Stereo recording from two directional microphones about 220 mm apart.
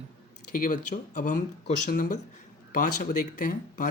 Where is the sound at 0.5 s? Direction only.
40° left (ahead or behind).